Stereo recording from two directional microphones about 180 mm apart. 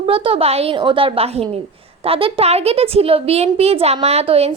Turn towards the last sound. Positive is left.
turn(degrees=-35)  # may be behind; listen again after turning